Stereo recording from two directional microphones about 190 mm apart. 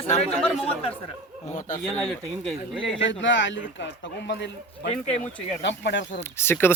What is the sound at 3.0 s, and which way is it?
Speech, 75° left (ahead or behind).